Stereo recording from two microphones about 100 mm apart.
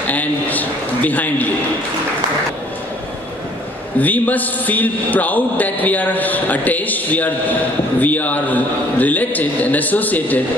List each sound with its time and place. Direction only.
0.0 s a man's voice: 15° left (ahead or behind)
4.0 s a man's voice: 15° left (ahead or behind)